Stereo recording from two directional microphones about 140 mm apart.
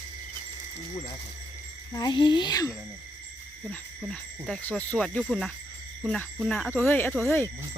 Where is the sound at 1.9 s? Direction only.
30° left (ahead or behind).